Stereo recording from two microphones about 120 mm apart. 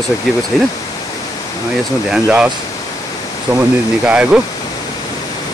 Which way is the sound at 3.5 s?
35° right (ahead or behind).